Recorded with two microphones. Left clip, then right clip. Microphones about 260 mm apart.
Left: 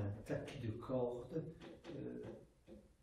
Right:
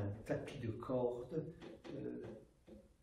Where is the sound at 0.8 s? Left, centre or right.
Left.